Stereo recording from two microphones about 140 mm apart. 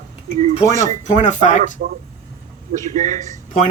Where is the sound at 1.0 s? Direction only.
55° left (ahead or behind).